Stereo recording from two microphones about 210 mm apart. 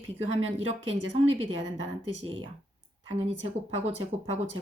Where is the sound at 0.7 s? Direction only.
25° right (ahead or behind).